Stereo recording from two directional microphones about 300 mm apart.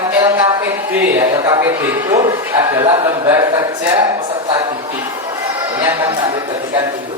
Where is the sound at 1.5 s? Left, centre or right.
Centre.